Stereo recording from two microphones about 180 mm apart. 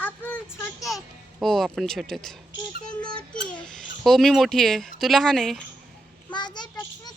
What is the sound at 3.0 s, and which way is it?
Speech, 25° left (ahead or behind).